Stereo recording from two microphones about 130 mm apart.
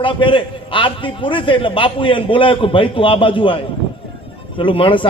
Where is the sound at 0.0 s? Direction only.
40° left (ahead or behind).